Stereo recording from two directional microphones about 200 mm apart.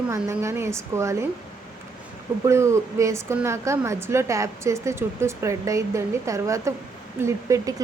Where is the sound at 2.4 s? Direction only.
15° right (ahead or behind).